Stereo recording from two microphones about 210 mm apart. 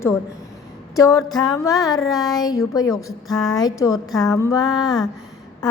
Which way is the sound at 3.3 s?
5° left (ahead or behind).